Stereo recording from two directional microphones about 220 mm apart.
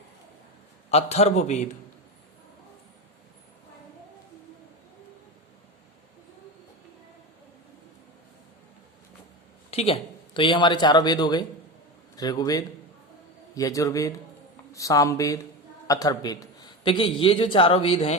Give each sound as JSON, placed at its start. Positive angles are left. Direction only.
{"t": 0.9, "sound": "a man's voice", "side_deg": 30}
{"t": 9.6, "sound": "speech", "side_deg": 25}
{"t": 12.1, "sound": "mantra", "side_deg": 15}
{"t": 15.9, "sound": "a man's voice", "side_deg": 15}